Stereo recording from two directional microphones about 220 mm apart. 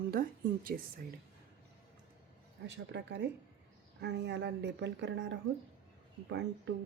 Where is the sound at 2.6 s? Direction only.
50° right (ahead or behind).